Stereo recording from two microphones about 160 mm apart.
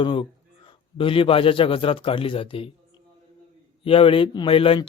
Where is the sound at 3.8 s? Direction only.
35° left (ahead or behind).